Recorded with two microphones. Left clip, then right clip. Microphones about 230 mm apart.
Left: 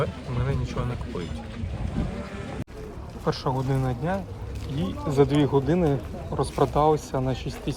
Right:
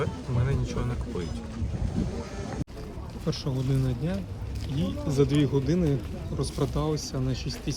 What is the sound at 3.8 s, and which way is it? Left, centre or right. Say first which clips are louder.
Speech: left 5 dB; centre.